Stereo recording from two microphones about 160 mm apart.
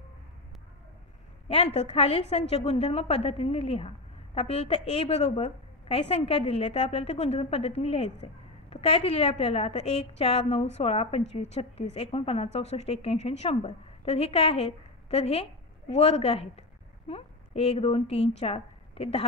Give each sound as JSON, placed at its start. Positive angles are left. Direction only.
{"t": 1.5, "sound": "a woman's voice", "side_deg": 40}